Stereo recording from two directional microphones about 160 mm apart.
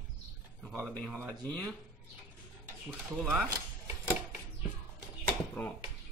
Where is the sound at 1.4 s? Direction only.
10° left (ahead or behind).